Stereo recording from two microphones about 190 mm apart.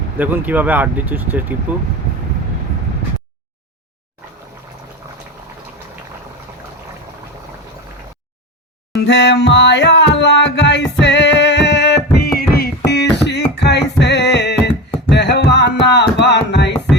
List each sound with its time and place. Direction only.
0.2 s speech: 10° right (ahead or behind)
9.0 s music: 65° left (ahead or behind)
12.1 s music: 55° left (ahead or behind)